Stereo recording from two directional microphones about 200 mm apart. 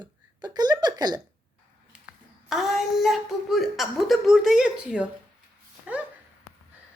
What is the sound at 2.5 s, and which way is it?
Speech, centre (ahead or behind).